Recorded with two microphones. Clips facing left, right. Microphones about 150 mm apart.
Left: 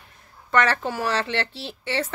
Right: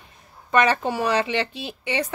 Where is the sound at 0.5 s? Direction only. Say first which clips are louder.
Right 2 dB; 15° right (ahead or behind).